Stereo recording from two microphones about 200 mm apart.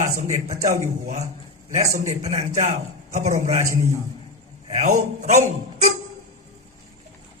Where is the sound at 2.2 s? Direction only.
35° right (ahead or behind).